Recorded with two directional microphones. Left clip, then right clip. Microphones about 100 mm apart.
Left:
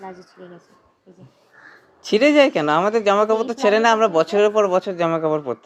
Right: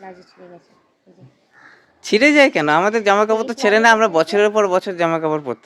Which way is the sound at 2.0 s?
40° right (ahead or behind).